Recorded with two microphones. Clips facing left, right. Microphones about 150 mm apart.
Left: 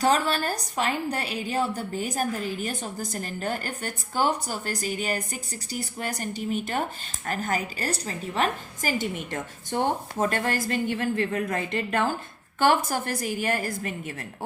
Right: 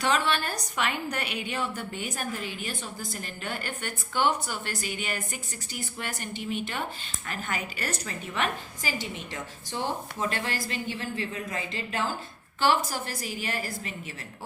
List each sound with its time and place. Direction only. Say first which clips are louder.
0.0 s a woman's voice: left 3 dB; 40° left (ahead or behind)